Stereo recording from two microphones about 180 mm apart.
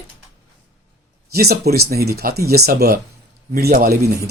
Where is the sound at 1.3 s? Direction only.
60° right (ahead or behind).